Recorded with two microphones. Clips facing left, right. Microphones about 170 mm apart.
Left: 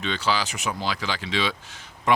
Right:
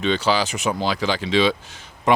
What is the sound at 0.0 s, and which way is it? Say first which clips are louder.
Speech: right 6 dB; 20° right (ahead or behind).